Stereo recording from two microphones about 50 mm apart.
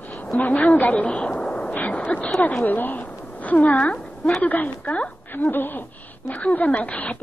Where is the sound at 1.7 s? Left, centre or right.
Left.